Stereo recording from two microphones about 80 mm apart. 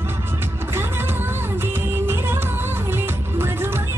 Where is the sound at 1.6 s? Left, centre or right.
Right.